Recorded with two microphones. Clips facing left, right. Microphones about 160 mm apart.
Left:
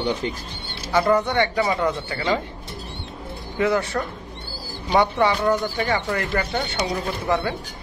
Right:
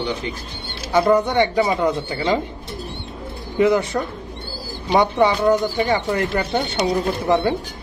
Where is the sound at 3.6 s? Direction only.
15° right (ahead or behind).